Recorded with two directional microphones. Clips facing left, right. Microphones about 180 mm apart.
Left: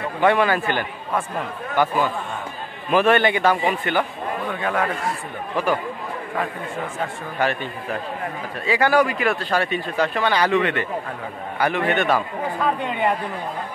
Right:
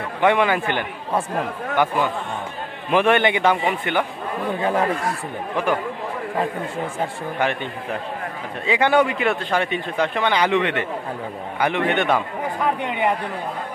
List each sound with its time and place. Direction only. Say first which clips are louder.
0.2 s a man's voice: even; 15° right (ahead or behind)
2.9 s a man's voice: even; 20° right (ahead or behind)
7.0 s a man's voice: even; 20° right (ahead or behind)